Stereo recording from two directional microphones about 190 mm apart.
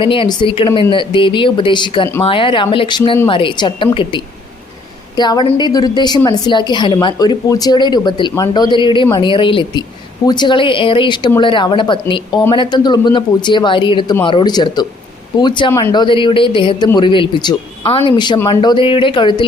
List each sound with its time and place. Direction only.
0.0 s a woman's voice: 25° left (ahead or behind)